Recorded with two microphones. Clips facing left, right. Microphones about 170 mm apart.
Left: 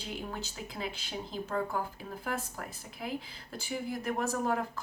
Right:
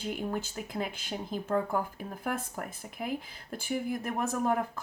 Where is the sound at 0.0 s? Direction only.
50° right (ahead or behind).